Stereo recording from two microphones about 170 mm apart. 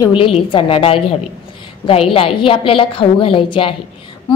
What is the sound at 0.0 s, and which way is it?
A woman's voice, 30° left (ahead or behind).